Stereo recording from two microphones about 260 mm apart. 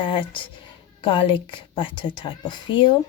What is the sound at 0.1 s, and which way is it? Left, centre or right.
Speech, centre.